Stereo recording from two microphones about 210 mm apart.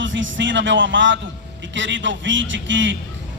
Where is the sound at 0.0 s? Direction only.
60° right (ahead or behind).